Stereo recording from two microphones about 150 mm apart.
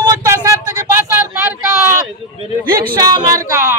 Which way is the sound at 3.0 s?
25° right (ahead or behind).